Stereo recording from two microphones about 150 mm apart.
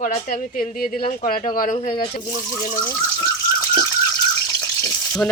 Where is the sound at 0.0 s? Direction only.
55° left (ahead or behind).